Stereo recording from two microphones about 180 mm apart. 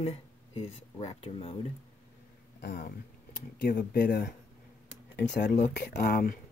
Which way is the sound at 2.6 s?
55° left (ahead or behind).